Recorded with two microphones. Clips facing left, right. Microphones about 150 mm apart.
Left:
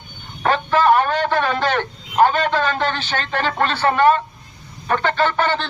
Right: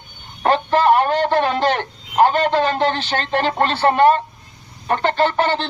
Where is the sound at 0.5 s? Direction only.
30° right (ahead or behind).